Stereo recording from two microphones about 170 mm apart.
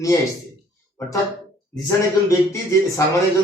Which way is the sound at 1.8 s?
20° left (ahead or behind).